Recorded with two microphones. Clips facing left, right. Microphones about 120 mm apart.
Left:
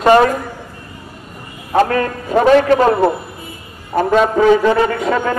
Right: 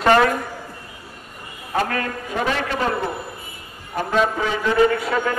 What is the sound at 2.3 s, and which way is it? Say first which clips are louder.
Speech: left 13 dB; 45° left (ahead or behind).